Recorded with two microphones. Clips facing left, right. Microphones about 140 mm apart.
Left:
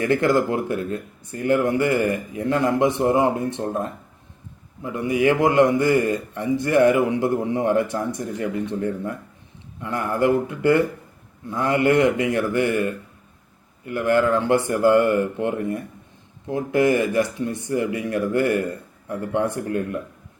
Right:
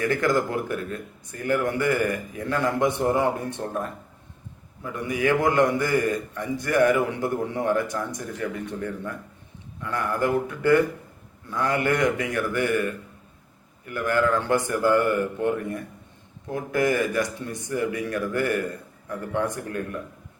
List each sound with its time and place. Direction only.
0.0 s a man's voice: 25° left (ahead or behind)
4.8 s a man's voice: 25° left (ahead or behind)